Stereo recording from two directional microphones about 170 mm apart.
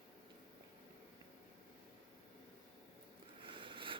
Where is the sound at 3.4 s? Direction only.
30° right (ahead or behind).